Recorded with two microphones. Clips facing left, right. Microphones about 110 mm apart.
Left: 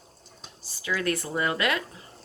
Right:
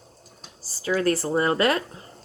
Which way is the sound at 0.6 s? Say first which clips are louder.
Right 6 dB; 35° right (ahead or behind).